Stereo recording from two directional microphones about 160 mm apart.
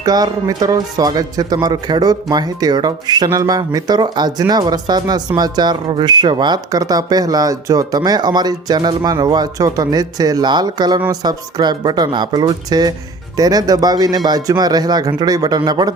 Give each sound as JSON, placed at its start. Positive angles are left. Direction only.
{"t": 0.0, "sound": "speech", "side_deg": -25}